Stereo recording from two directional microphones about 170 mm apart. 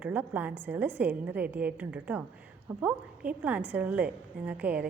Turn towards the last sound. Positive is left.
turn(degrees=-10)  # may be behind; listen again after turning